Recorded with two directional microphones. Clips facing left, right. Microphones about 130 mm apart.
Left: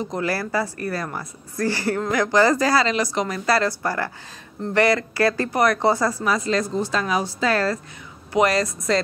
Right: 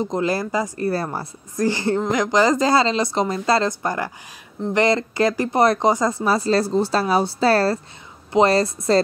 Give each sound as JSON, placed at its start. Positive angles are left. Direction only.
{"t": 0.0, "sound": "speech", "side_deg": -20}